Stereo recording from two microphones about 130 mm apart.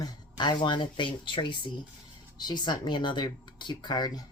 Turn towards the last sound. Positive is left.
turn(degrees=30)  # may be behind; listen again after turning